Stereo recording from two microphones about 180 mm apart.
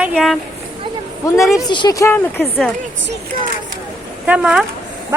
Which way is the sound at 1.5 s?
20° left (ahead or behind).